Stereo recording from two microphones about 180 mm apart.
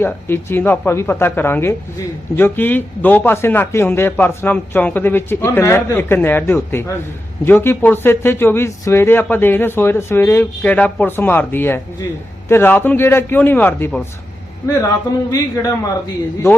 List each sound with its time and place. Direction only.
0.0 s a man's voice: 10° left (ahead or behind)
15.3 s a man's voice: 20° left (ahead or behind)